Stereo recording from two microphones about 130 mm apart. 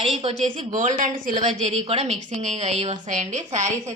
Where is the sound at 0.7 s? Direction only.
75° right (ahead or behind); by 2.9 s 55° right (ahead or behind).